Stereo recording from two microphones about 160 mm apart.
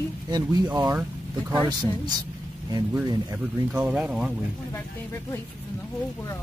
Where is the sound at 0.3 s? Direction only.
25° right (ahead or behind).